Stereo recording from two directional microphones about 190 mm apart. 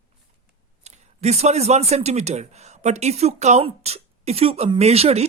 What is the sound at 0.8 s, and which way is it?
Speech, 35° right (ahead or behind).